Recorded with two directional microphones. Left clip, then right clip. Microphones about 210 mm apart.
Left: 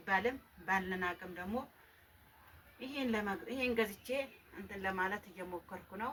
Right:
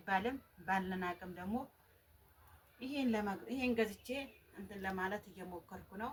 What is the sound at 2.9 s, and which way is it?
Speech, 15° right (ahead or behind).